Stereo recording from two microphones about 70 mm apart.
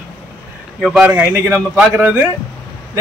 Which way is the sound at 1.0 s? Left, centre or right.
Right.